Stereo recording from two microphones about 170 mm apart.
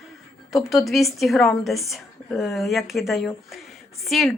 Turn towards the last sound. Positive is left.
turn(degrees=0)  # may be behind; listen again after turning